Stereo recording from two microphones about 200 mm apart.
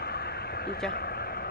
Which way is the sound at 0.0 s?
55° left (ahead or behind).